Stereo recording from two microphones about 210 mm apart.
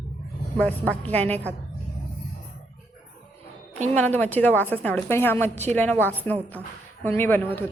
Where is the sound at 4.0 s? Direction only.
5° left (ahead or behind).